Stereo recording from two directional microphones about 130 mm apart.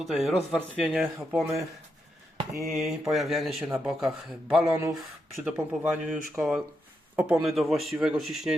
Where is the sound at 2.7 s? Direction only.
Centre (ahead or behind).